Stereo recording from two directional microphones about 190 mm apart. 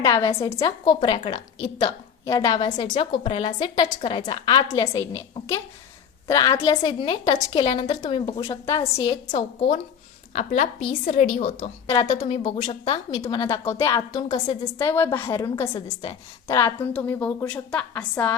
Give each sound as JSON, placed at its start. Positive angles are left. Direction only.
{"t": 0.0, "sound": "a woman's voice", "side_deg": 15}